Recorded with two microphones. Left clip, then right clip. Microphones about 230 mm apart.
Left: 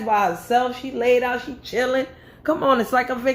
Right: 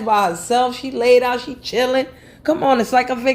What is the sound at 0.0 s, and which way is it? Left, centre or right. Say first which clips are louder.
Speech: right 3 dB; right.